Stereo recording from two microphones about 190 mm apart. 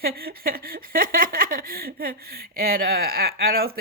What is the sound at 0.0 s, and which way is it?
Speech, 55° right (ahead or behind).